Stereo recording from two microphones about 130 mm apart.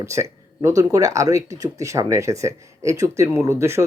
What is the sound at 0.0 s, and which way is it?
Speech, 20° right (ahead or behind).